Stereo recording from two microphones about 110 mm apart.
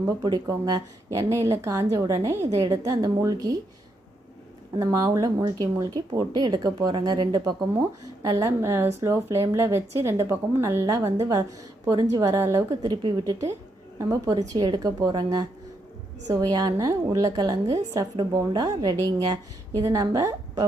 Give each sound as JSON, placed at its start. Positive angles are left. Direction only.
{"t": 0.0, "sound": "speech", "side_deg": -35}
{"t": 4.8, "sound": "a woman's voice", "side_deg": -35}